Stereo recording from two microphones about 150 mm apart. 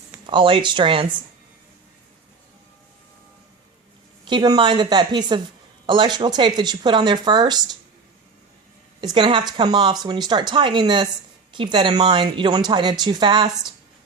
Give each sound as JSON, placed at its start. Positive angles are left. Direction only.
{"t": 0.3, "sound": "speech", "side_deg": -35}
{"t": 4.3, "sound": "speech", "side_deg": -30}
{"t": 9.1, "sound": "speech", "side_deg": -35}